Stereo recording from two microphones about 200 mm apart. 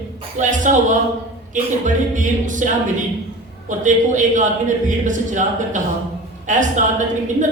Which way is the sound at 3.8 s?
40° right (ahead or behind).